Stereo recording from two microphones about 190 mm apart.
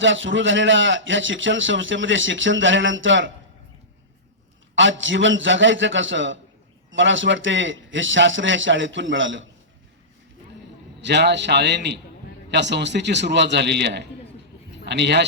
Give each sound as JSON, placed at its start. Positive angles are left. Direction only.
{"t": 0.0, "sound": "a man's voice", "side_deg": -80}
{"t": 4.7, "sound": "a man's voice", "side_deg": -75}
{"t": 11.0, "sound": "a man's voice", "side_deg": -65}